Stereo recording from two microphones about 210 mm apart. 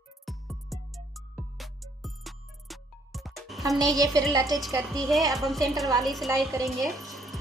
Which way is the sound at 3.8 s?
15° right (ahead or behind).